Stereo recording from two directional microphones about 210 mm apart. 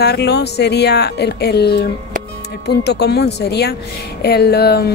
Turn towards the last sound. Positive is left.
turn(degrees=50)  # may be behind; listen again after turning